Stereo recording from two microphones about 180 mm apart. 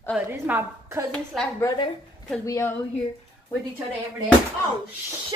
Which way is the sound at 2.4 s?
15° left (ahead or behind).